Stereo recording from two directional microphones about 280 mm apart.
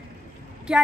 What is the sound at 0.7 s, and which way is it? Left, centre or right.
Speech, centre.